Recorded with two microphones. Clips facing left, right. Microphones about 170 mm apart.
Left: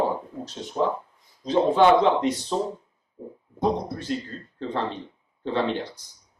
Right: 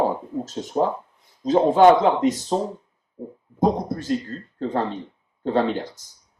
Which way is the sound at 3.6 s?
45° right (ahead or behind).